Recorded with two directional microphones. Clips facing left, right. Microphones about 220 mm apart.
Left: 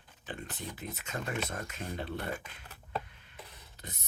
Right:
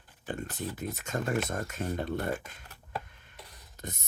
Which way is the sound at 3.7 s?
45° right (ahead or behind).